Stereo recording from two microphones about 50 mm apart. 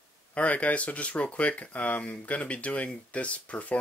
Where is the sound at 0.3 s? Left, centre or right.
Left.